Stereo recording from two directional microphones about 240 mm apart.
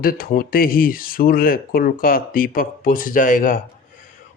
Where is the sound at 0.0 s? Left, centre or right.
Left.